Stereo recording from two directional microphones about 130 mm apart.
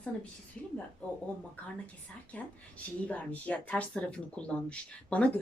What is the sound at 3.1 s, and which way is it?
Speech, 10° left (ahead or behind).